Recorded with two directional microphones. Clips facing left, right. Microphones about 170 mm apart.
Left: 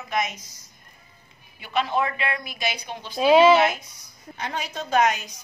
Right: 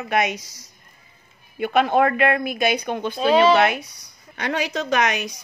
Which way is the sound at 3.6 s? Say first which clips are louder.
Right 3 dB; 70° right (ahead or behind).